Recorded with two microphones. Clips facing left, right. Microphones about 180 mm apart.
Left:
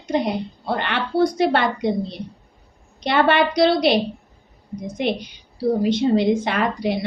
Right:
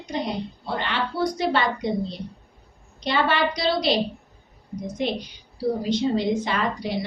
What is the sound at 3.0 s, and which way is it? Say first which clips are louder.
Speech: left 5 dB; 60° left (ahead or behind).